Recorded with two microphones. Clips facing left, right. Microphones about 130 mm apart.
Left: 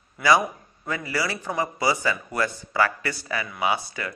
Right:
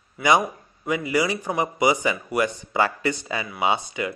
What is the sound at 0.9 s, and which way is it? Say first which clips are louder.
Speech: right 5 dB; 20° right (ahead or behind).